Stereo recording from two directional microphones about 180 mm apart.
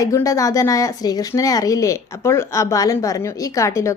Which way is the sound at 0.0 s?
20° left (ahead or behind).